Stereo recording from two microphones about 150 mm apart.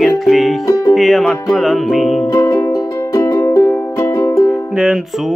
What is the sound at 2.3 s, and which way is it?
Music, 20° left (ahead or behind).